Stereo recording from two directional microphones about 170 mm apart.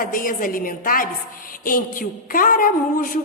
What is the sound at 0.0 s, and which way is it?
A woman's voice, 55° left (ahead or behind).